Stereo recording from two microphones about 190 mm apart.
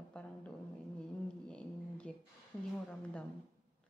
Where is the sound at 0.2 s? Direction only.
5° left (ahead or behind).